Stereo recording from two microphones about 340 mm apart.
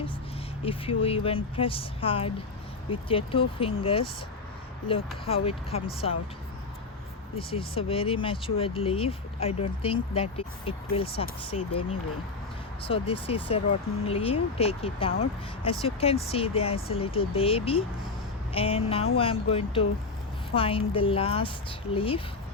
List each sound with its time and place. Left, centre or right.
0.6 s speech: centre
7.3 s speech: centre
12.8 s speech: centre